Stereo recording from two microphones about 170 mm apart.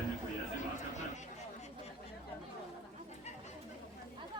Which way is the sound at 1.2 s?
40° left (ahead or behind).